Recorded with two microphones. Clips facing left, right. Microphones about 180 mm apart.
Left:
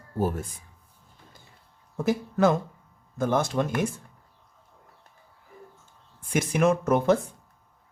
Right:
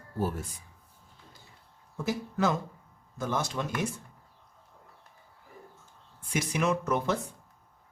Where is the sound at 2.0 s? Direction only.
55° left (ahead or behind).